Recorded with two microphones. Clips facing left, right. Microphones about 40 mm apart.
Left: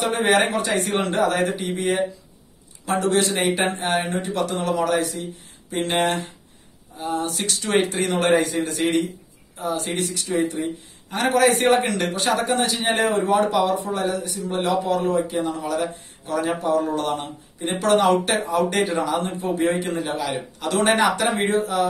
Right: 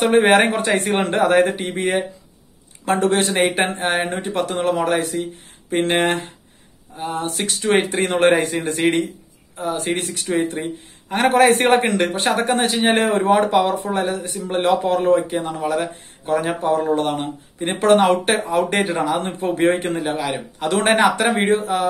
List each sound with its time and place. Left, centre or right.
0.0 s speech: right
20.0 s a man's voice: right